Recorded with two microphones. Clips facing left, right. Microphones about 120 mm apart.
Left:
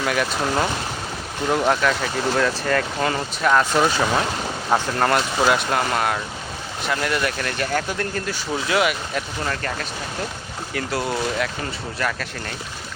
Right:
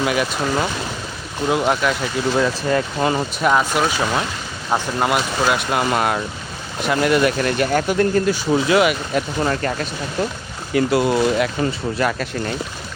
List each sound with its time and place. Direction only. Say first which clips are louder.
0.0 s speech: right 2 dB; 5° right (ahead or behind)
9.4 s speech: right 6 dB; 20° right (ahead or behind)